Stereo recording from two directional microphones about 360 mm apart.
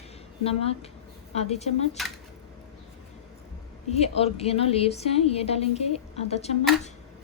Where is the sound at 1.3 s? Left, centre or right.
Centre.